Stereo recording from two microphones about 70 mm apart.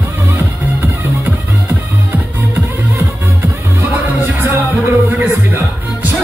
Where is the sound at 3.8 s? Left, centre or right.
Right.